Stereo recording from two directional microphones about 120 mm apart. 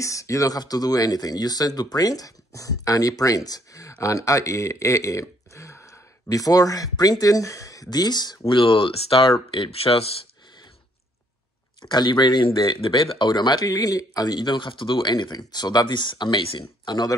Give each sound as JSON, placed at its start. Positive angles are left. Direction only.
{"t": 0.0, "sound": "speech", "side_deg": 25}
{"t": 8.5, "sound": "speech", "side_deg": 45}
{"t": 11.8, "sound": "speech", "side_deg": 40}